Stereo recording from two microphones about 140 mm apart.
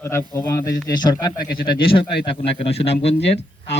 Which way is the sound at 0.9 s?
30° left (ahead or behind).